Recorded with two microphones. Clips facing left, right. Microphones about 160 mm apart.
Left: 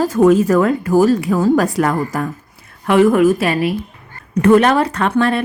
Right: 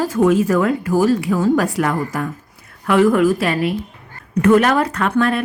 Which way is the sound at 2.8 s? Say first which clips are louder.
Left 2 dB; 25° left (ahead or behind).